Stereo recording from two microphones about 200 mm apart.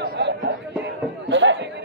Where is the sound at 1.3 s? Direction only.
65° right (ahead or behind).